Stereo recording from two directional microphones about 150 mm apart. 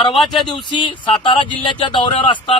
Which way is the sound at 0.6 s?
30° left (ahead or behind).